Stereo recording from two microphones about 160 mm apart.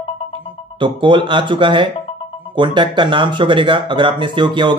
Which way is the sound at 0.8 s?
30° right (ahead or behind).